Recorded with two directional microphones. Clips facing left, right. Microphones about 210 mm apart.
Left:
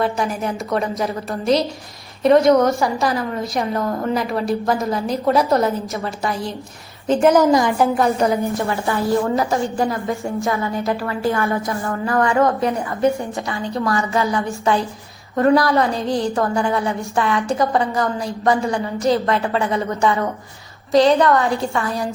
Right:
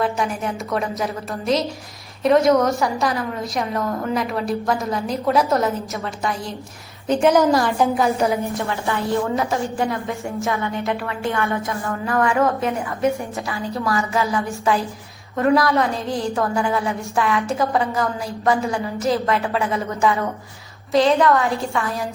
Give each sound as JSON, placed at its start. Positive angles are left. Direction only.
{"t": 0.0, "sound": "a woman's voice", "side_deg": 0}
{"t": 7.8, "sound": "a woman's voice", "side_deg": 0}